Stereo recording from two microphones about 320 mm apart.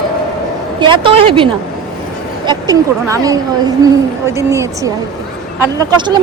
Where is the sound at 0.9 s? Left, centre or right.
Centre.